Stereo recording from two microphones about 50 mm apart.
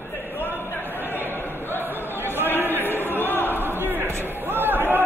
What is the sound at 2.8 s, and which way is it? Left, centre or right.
Choir, left.